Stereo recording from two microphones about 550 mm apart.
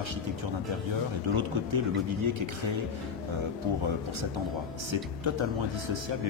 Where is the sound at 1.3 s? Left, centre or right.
Right.